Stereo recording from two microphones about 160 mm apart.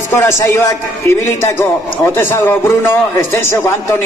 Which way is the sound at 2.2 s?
15° left (ahead or behind).